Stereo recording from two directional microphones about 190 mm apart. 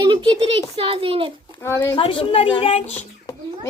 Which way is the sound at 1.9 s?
30° left (ahead or behind).